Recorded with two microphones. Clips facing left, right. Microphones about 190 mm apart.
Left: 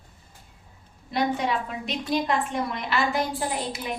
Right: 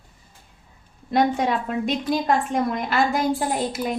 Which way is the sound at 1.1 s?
50° right (ahead or behind).